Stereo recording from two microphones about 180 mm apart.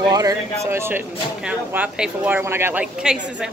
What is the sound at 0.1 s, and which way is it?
Speech, 20° right (ahead or behind).